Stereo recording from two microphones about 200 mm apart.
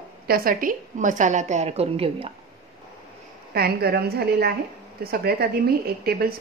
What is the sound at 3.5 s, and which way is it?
A woman's voice, 50° right (ahead or behind).